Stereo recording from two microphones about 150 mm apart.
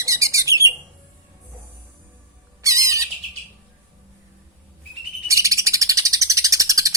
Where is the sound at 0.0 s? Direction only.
20° right (ahead or behind).